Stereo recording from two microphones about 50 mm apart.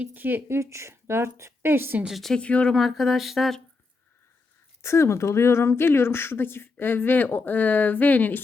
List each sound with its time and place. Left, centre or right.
0.0 s speech: right
0.6 s a woman's voice: right
2.3 s speech: left
2.7 s speech: centre
4.8 s a woman's voice: left